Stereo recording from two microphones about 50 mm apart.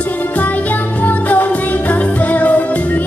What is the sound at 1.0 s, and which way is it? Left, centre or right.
Music, left.